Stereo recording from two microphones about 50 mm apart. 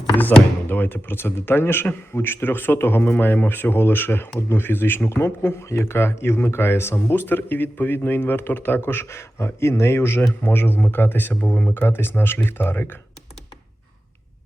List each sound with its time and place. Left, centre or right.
0.2 s speech: left
4.4 s speech: left
5.0 s speech: left
8.9 s speech: left
10.4 s speech: left